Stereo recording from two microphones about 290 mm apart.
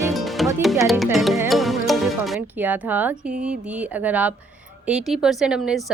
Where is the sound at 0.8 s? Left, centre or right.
Centre.